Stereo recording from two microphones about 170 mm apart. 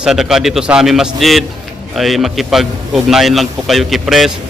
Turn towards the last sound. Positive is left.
turn(degrees=0)  # may be behind; listen again after turning